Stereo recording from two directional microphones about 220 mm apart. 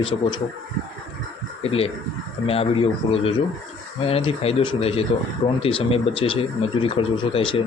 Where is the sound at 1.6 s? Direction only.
25° left (ahead or behind).